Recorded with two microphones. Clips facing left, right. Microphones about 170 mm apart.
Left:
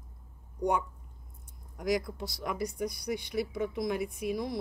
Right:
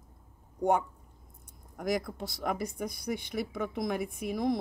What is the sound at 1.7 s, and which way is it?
Speech, 50° right (ahead or behind).